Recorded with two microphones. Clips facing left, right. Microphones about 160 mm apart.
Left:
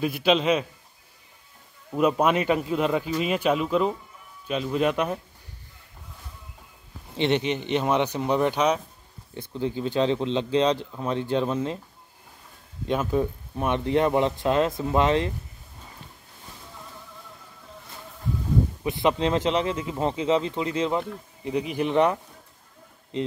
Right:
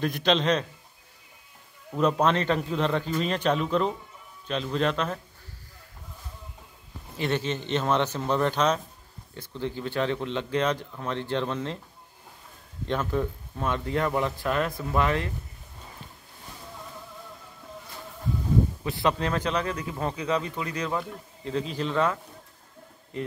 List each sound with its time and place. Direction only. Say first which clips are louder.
0.0 s a man's voice: left 2 dB; 5° left (ahead or behind)
1.9 s a man's voice: left 2 dB; 10° left (ahead or behind)
7.2 s a man's voice: left 4 dB; 20° left (ahead or behind)
12.8 s speech: left 3 dB; 15° left (ahead or behind)
18.9 s a man's voice: left 3 dB; 20° left (ahead or behind)